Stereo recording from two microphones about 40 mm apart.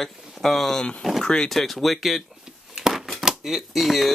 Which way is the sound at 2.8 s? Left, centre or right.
Centre.